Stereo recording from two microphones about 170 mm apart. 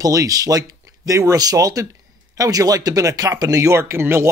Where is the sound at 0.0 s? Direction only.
20° right (ahead or behind).